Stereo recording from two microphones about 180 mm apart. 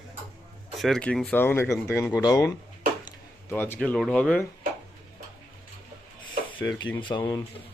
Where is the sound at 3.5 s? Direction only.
10° left (ahead or behind).